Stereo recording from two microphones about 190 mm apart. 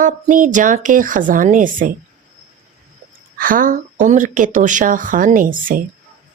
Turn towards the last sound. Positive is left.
turn(degrees=-45)  # may be behind; listen again after turning